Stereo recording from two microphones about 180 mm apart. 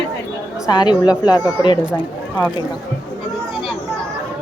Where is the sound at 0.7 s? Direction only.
25° left (ahead or behind).